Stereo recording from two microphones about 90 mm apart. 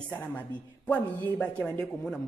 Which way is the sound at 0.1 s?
20° left (ahead or behind).